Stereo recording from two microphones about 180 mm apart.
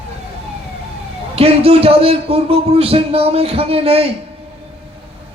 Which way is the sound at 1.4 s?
35° right (ahead or behind).